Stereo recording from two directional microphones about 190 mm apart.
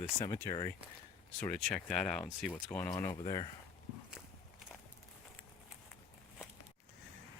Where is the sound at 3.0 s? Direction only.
15° left (ahead or behind).